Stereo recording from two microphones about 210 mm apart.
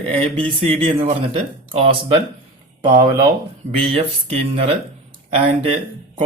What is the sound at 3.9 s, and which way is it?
Speech, 25° right (ahead or behind).